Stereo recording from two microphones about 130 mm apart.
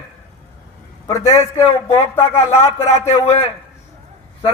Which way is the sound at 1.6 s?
45° left (ahead or behind).